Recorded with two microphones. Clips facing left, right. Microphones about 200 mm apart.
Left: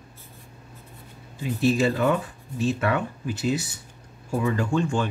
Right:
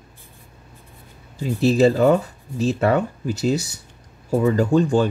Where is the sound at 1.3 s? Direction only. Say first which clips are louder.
Right 5 dB; 40° right (ahead or behind).